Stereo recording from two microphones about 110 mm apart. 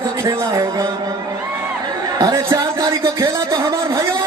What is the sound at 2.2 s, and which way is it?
A man's voice, 30° right (ahead or behind).